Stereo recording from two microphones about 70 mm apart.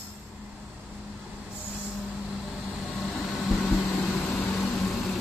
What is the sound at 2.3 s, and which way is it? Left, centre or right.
Vehicle, centre.